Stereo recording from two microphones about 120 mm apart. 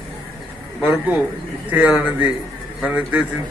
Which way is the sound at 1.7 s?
15° right (ahead or behind).